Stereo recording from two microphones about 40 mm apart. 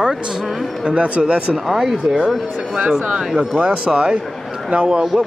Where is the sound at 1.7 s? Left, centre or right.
Centre.